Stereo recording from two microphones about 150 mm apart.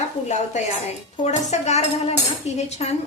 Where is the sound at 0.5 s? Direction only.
55° left (ahead or behind).